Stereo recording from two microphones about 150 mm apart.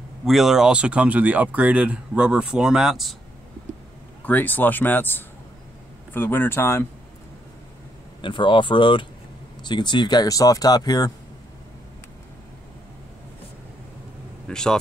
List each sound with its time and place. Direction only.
0.2 s speech: centre (ahead or behind)
4.2 s speech: 10° left (ahead or behind)
8.2 s speech: 35° left (ahead or behind)
14.5 s speech: 5° left (ahead or behind)